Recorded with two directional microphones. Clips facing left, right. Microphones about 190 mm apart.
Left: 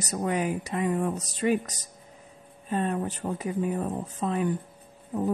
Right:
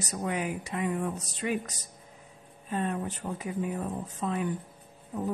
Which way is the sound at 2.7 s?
35° left (ahead or behind).